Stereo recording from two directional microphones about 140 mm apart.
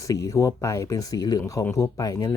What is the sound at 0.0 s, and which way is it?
Speech, 25° left (ahead or behind).